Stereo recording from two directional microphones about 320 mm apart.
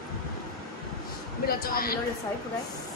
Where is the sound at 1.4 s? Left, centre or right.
Left.